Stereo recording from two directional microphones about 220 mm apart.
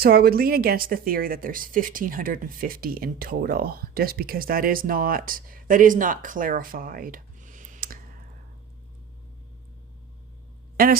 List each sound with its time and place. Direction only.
0.0 s speech: 40° right (ahead or behind)
10.8 s a woman's voice: 40° right (ahead or behind)